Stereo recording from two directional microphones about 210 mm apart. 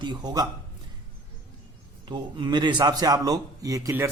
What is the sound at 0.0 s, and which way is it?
Speech, 20° right (ahead or behind).